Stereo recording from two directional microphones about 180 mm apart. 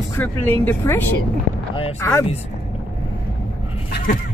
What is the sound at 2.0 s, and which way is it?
Speech, 15° left (ahead or behind).